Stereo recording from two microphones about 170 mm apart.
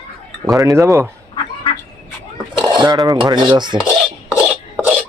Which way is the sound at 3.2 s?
25° right (ahead or behind).